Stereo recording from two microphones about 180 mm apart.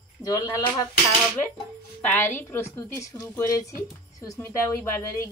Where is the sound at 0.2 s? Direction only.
20° left (ahead or behind).